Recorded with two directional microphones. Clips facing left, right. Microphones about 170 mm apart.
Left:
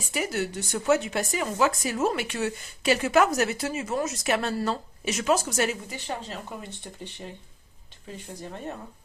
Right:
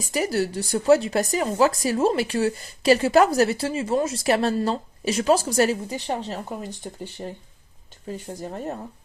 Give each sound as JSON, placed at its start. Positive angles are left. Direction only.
{"t": 0.0, "sound": "speech", "side_deg": -35}